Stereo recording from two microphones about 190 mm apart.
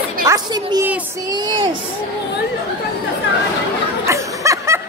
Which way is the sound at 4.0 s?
15° right (ahead or behind).